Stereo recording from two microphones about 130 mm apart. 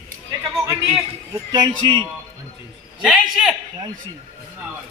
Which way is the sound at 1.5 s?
35° right (ahead or behind).